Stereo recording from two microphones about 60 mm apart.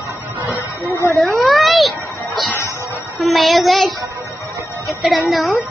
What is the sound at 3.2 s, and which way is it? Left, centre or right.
Speech, centre.